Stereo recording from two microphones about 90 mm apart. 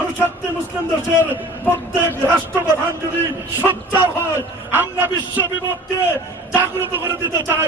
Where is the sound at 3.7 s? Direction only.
20° right (ahead or behind).